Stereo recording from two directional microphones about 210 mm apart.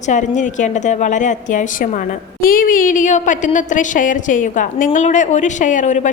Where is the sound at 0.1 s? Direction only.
35° left (ahead or behind).